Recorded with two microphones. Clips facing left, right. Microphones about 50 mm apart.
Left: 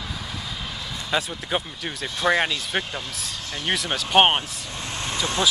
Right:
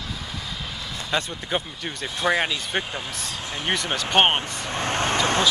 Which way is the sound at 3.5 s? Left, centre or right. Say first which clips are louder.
Even; centre.